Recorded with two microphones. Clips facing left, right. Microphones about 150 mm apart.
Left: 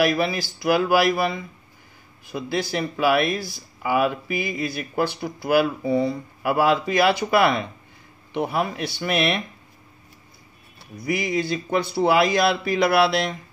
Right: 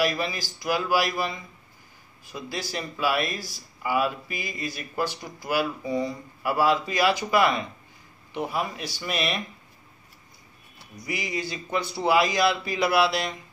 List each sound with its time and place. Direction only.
0.0 s speech: 65° left (ahead or behind)
11.0 s speech: 60° left (ahead or behind)